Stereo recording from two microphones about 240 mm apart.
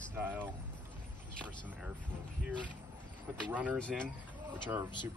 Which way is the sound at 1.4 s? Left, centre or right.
Centre.